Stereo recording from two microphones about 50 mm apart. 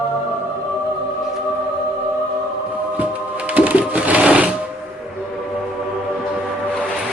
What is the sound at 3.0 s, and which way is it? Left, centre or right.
Music, right.